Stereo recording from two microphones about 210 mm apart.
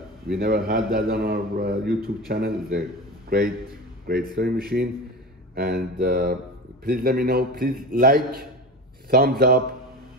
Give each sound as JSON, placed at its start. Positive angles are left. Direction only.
{"t": 0.4, "sound": "a man's voice", "side_deg": -45}